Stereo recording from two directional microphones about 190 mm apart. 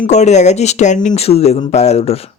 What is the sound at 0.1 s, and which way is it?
Speech, 35° left (ahead or behind).